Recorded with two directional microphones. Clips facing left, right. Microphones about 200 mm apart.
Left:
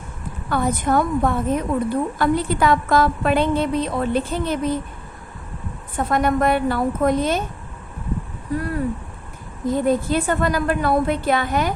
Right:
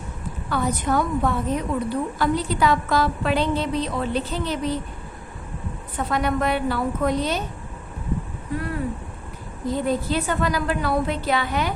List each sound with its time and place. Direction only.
0.5 s a woman's voice: 50° left (ahead or behind)
6.0 s a woman's voice: 50° left (ahead or behind)
9.6 s a woman's voice: 50° left (ahead or behind)